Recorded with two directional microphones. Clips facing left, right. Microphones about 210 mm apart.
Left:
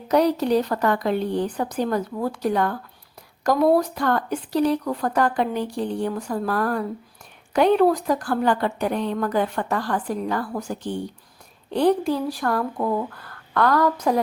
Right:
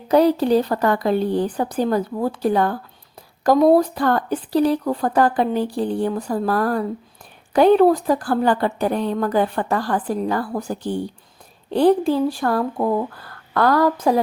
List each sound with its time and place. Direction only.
0.1 s a woman's voice: 30° right (ahead or behind)